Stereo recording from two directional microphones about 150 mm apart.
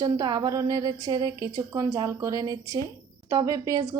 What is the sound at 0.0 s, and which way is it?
A woman's voice, 25° right (ahead or behind).